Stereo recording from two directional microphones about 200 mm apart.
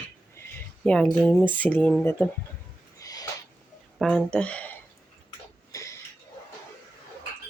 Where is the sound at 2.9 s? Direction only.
15° left (ahead or behind).